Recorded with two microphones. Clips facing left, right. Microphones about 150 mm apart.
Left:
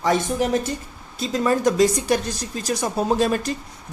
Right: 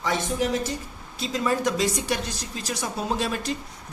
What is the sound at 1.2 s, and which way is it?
Speech, 45° left (ahead or behind).